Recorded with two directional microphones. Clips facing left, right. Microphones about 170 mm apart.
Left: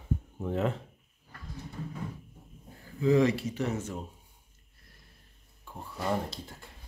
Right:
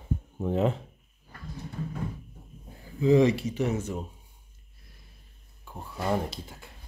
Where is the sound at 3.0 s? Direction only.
20° right (ahead or behind).